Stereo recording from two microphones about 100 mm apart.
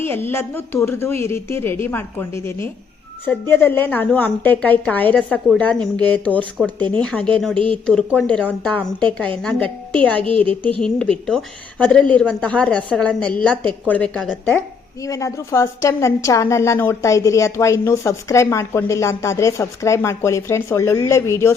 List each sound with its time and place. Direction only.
0.0 s a woman's voice: 20° left (ahead or behind)
15.0 s a woman's voice: 30° left (ahead or behind)